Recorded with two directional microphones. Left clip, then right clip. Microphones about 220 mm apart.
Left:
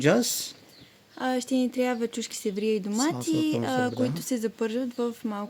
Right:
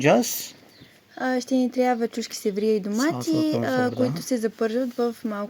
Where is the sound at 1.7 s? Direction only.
Centre (ahead or behind).